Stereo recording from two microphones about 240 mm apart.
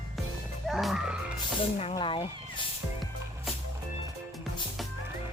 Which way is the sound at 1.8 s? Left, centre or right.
Left.